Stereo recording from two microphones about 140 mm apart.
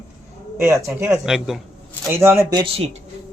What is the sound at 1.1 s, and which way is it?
Cough, 5° right (ahead or behind).